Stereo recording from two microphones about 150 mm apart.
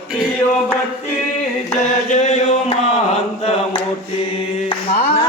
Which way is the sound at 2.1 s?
50° left (ahead or behind).